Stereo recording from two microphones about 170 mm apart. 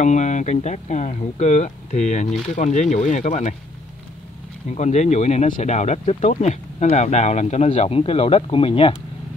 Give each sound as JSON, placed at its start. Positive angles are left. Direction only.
{"t": 0.0, "sound": "speech", "side_deg": 45}
{"t": 4.6, "sound": "speech", "side_deg": 40}